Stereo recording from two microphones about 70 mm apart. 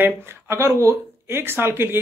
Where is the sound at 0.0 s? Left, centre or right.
Right.